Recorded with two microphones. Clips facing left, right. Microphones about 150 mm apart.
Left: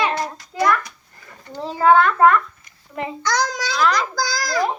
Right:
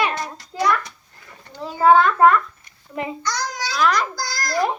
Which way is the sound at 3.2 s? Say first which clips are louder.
Left 4 dB; 90° left.